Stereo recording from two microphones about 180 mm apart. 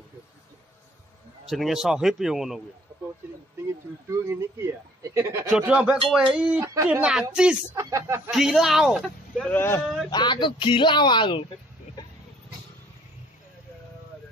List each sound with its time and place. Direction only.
1.5 s speech: centre (ahead or behind)
3.6 s speech: 15° right (ahead or behind)
6.6 s speech: 15° right (ahead or behind)
6.9 s speech: 5° right (ahead or behind)
7.8 s speech: 15° right (ahead or behind)
8.3 s speech: centre (ahead or behind)
10.0 s speech: 25° left (ahead or behind)